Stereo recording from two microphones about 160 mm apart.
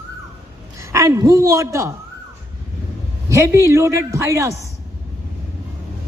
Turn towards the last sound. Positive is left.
turn(degrees=-20)  # may be behind; listen again after turning